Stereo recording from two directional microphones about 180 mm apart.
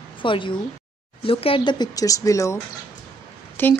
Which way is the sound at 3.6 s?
10° left (ahead or behind).